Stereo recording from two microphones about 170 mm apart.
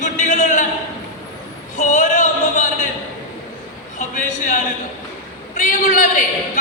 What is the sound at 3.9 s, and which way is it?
Speech, 50° left (ahead or behind).